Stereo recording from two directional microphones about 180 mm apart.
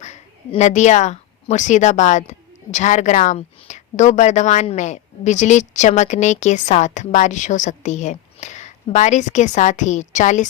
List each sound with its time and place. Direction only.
0.0 s a woman's voice: 40° left (ahead or behind)